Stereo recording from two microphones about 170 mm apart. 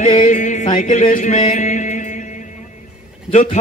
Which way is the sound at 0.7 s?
50° left (ahead or behind).